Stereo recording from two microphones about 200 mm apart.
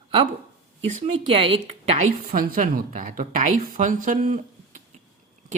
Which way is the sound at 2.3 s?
45° right (ahead or behind).